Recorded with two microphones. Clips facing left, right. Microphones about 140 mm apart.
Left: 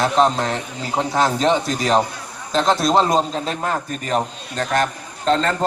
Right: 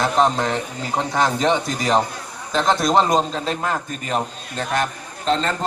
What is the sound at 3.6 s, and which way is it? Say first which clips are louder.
A man's voice: left 1 dB; 40° left (ahead or behind).